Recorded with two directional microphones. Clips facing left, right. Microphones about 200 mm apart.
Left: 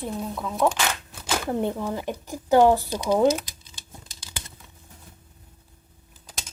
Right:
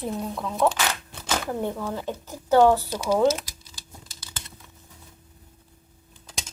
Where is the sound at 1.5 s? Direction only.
20° left (ahead or behind).